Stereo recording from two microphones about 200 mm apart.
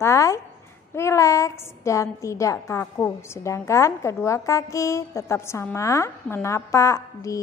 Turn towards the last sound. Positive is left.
turn(degrees=15)  # may be behind; listen again after turning